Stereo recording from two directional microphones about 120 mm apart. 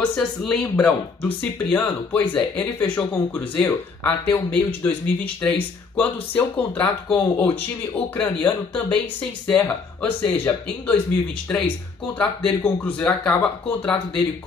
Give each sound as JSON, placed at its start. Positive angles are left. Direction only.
{"t": 0.1, "sound": "speech", "side_deg": 5}